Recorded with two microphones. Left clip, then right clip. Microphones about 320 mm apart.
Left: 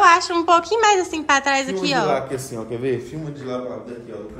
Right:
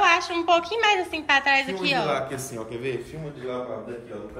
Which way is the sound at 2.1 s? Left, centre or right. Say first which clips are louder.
Left 5 dB; left.